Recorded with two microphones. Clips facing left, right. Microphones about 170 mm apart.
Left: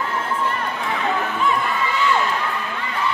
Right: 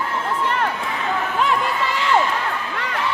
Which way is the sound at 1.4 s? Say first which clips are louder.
Right 3 dB; 85° right.